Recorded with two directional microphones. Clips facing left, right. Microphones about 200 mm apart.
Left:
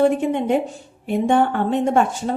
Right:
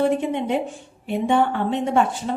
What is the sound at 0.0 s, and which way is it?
A woman's voice, 50° left (ahead or behind).